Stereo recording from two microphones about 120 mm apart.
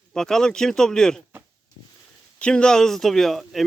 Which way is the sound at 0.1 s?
5° left (ahead or behind).